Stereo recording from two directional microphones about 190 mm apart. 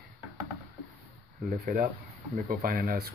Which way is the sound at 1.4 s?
45° right (ahead or behind).